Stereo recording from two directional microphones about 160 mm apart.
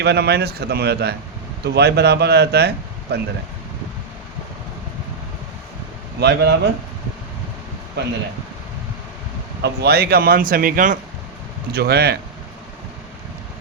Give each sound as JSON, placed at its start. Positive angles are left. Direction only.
{"t": 0.0, "sound": "speech", "side_deg": -90}
{"t": 6.1, "sound": "speech", "side_deg": -90}
{"t": 8.0, "sound": "speech", "side_deg": -90}
{"t": 9.6, "sound": "speech", "side_deg": -90}
{"t": 11.7, "sound": "speech", "side_deg": -90}